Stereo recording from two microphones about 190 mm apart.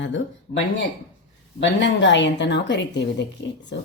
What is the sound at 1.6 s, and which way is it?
Speech, 70° left (ahead or behind).